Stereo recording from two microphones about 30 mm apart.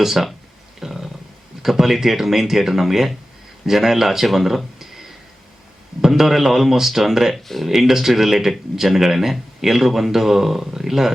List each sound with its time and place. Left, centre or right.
0.0 s speech: centre
0.8 s a sound: centre
1.6 s speech: centre
4.8 s a sound: centre
6.0 s speech: centre
7.4 s speech: centre
7.7 s speech: centre